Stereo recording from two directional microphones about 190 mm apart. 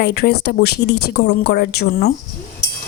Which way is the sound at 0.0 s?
55° left (ahead or behind).